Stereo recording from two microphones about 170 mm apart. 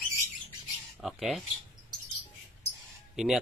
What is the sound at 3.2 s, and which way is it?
Speech, centre (ahead or behind).